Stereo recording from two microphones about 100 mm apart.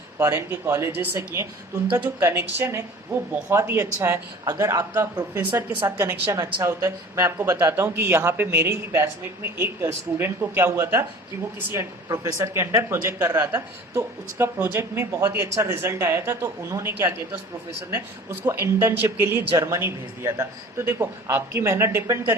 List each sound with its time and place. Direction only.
0.2 s speech: 25° right (ahead or behind)
18.4 s speech: 25° right (ahead or behind)
19.5 s a woman's voice: 35° right (ahead or behind)